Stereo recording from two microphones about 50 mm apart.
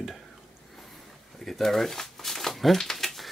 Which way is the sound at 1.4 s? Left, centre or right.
Centre.